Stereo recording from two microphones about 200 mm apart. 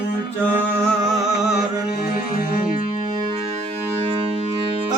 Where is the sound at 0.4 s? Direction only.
5° left (ahead or behind).